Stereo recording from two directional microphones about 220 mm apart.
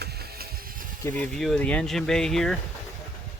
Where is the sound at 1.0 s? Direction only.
10° left (ahead or behind).